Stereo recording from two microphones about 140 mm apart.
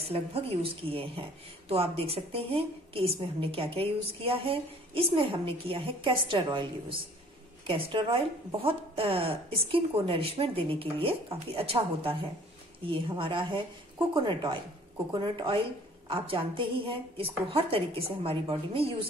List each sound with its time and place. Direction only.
0.0 s a woman's voice: 45° right (ahead or behind)